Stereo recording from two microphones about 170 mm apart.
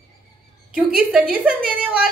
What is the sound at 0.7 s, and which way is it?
A woman's voice, 5° right (ahead or behind).